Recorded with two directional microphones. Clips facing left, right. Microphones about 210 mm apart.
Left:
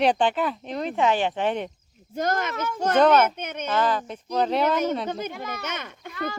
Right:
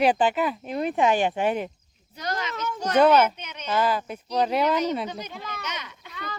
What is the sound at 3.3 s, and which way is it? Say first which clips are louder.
Speech: left 4 dB; 50° left (ahead or behind).